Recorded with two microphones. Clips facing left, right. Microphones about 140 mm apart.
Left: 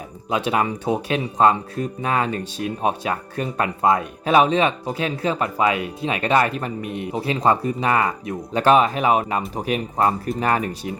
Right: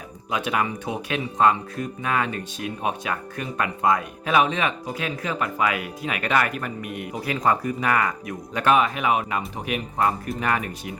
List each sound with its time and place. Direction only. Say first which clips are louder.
0.3 s speech: left 4 dB; 30° left (ahead or behind)